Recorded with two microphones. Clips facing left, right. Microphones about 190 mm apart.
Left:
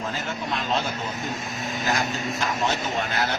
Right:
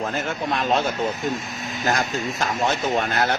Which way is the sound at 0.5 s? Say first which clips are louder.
Right 5 dB; 55° right (ahead or behind).